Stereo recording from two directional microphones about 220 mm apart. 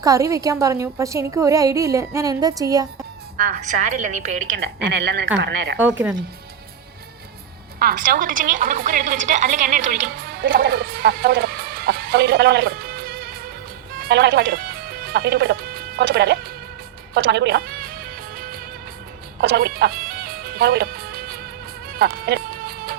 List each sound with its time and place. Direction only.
0.0 s a woman's voice: 15° right (ahead or behind)
3.3 s a woman's voice: 35° right (ahead or behind); by 5.8 s 50° right (ahead or behind)
7.8 s a woman's voice: 40° right (ahead or behind)
17.2 s music: 50° right (ahead or behind)